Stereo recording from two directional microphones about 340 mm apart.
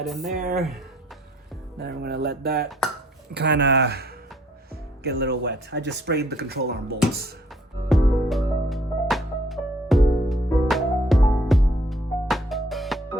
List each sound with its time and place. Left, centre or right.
0.2 s speech: right
2.0 s speech: right
7.9 s music: centre